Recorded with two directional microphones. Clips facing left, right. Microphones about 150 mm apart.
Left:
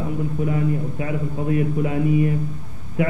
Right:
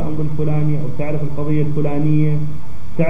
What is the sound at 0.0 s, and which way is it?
A man's voice, 35° right (ahead or behind).